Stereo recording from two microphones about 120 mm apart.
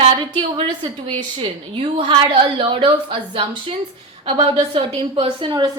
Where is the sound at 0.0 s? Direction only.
45° right (ahead or behind).